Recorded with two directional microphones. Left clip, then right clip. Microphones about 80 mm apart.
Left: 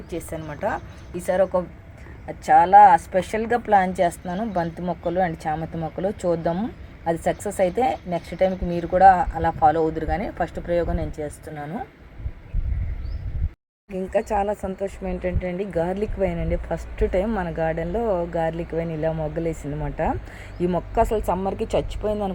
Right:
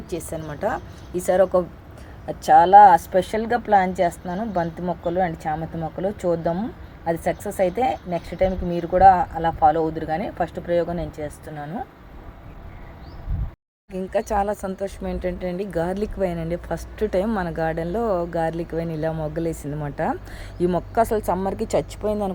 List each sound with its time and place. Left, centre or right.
0.1 s speech: right
0.4 s a woman's voice: right
2.5 s speech: right
3.1 s speech: centre
3.8 s a woman's voice: centre
7.1 s a woman's voice: centre
13.9 s a woman's voice: centre
14.3 s speech: centre
14.8 s a woman's voice: centre